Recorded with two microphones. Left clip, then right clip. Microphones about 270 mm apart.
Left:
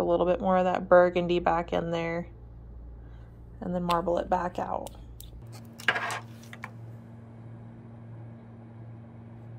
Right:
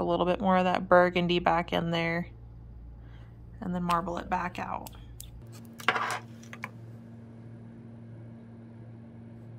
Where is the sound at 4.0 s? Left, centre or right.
Right.